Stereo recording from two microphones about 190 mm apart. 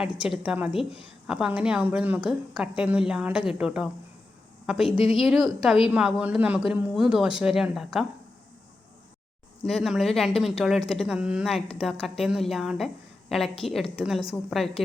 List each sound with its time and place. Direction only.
0.0 s a woman's voice: 5° right (ahead or behind)
9.6 s a woman's voice: centre (ahead or behind)